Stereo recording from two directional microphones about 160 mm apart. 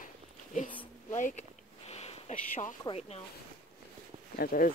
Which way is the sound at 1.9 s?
40° left (ahead or behind).